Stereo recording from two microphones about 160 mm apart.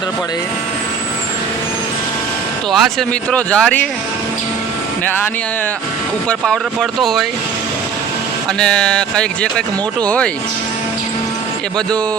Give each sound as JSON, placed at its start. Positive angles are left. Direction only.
{"t": 2.7, "sound": "speech", "side_deg": 5}
{"t": 6.2, "sound": "speech", "side_deg": 0}
{"t": 8.5, "sound": "speech", "side_deg": 5}